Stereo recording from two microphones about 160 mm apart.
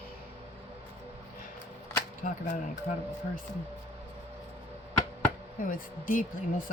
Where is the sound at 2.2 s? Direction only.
60° left (ahead or behind).